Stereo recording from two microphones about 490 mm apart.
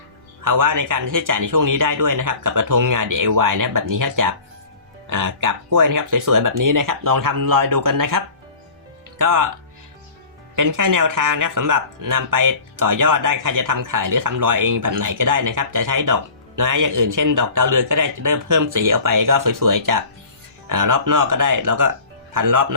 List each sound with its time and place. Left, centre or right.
0.4 s speech: right
10.5 s speech: right